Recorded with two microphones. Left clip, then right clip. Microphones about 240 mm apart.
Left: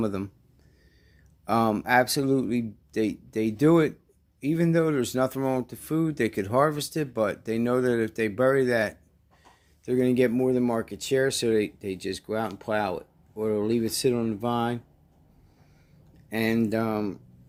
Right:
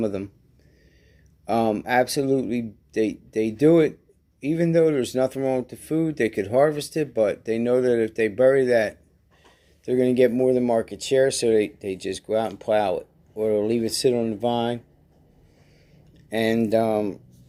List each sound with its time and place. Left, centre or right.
0.0 s speech: left
1.5 s speech: left
16.3 s speech: left